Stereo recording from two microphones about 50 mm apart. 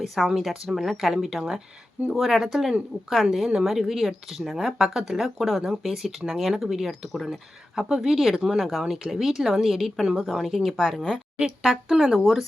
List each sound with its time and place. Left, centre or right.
0.0 s speech: centre
5.2 s speech: centre
11.3 s speech: centre
12.1 s speech: centre